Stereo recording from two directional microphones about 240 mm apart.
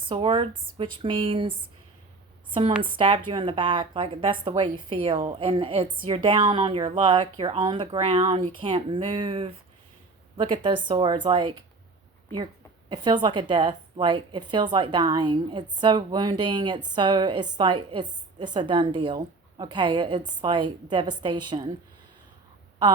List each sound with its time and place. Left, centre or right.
0.1 s a woman's voice: right
13.2 s a woman's voice: centre